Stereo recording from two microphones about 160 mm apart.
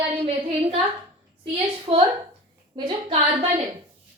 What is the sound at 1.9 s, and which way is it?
A woman's voice, 30° right (ahead or behind).